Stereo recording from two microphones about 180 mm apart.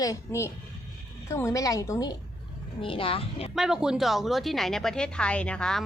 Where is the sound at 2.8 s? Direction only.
30° left (ahead or behind).